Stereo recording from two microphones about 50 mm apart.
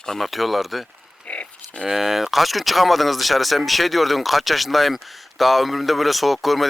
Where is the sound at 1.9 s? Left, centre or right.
Centre.